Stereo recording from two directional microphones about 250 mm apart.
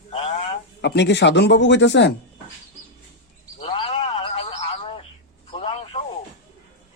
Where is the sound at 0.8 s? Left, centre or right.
Left.